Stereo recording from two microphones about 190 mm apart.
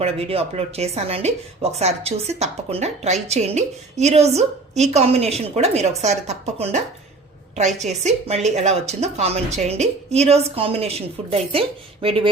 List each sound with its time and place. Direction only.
0.0 s speech: 30° right (ahead or behind)